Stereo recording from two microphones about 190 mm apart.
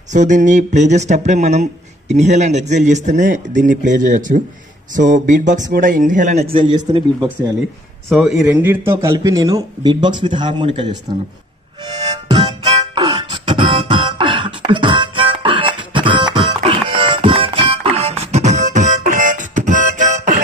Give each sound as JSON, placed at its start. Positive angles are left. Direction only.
{"t": 0.1, "sound": "speech", "side_deg": -40}
{"t": 8.1, "sound": "a man's voice", "side_deg": 0}
{"t": 11.8, "sound": "music", "side_deg": -20}